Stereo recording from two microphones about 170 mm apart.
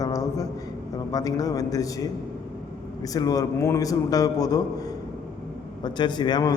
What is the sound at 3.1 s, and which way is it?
A man's voice, 20° left (ahead or behind).